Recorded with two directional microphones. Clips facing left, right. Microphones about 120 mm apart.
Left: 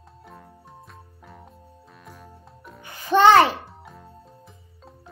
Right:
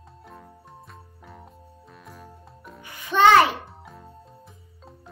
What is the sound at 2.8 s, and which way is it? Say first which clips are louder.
Music: left 2 dB; 35° left (ahead or behind).